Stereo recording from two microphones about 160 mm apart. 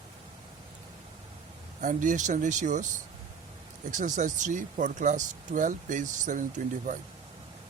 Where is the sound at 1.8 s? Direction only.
50° right (ahead or behind).